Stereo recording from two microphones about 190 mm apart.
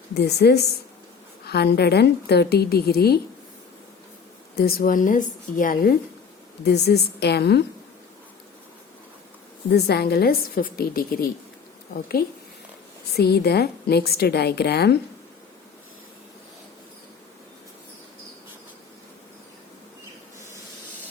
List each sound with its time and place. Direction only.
0.1 s a woman's voice: 60° left (ahead or behind)
4.5 s a woman's voice: 50° left (ahead or behind)
6.7 s a woman's voice: 60° left (ahead or behind)
9.7 s a woman's voice: 60° left (ahead or behind)